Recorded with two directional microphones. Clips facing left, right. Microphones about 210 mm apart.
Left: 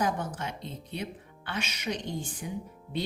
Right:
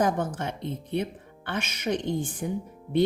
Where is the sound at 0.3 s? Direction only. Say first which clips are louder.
Right 6 dB; 55° right (ahead or behind).